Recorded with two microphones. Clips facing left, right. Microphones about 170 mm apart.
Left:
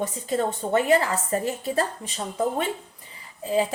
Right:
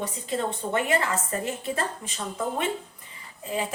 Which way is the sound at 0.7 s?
35° left (ahead or behind).